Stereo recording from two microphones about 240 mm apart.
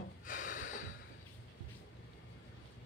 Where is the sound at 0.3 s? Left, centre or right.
Left.